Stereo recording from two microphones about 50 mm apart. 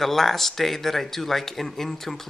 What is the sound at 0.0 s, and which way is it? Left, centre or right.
Speech, centre.